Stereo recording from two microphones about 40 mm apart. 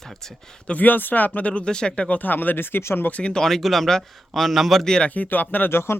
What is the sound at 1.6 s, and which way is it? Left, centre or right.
Speech, centre.